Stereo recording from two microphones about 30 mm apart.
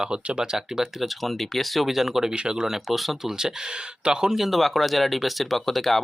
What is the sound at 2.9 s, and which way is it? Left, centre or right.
Speech, centre.